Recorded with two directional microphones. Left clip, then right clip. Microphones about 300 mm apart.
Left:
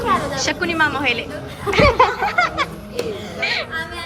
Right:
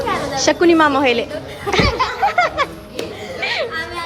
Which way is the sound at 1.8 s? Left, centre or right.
Left.